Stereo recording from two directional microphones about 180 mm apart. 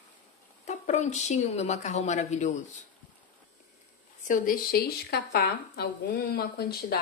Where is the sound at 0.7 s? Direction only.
40° left (ahead or behind).